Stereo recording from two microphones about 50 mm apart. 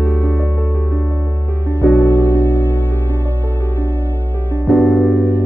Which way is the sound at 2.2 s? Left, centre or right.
Left.